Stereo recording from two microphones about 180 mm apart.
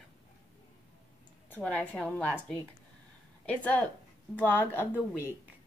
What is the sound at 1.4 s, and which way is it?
Speech, 10° left (ahead or behind).